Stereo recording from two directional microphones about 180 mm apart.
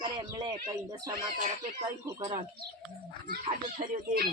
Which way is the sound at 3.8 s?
50° right (ahead or behind).